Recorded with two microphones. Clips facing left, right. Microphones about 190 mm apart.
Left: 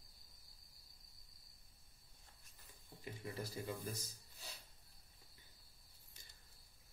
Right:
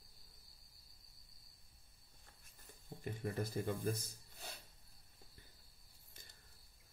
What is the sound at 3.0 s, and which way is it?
Speech, 50° right (ahead or behind).